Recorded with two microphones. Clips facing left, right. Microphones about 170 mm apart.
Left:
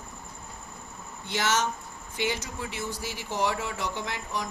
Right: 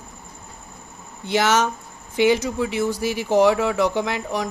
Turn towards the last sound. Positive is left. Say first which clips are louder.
# right 9 dB
turn(degrees=-90)